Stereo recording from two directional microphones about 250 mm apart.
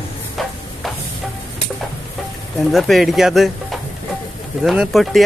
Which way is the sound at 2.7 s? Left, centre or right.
Centre.